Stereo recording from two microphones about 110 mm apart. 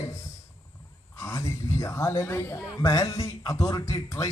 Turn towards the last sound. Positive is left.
turn(degrees=30)  # may be behind; listen again after turning